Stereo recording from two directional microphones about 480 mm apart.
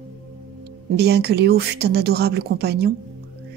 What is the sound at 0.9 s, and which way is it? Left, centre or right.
Speech, centre.